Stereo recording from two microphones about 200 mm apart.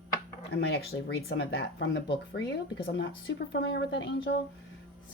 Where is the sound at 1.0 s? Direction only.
60° left (ahead or behind).